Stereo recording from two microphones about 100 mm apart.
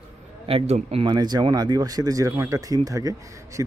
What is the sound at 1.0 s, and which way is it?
Speech, 45° right (ahead or behind).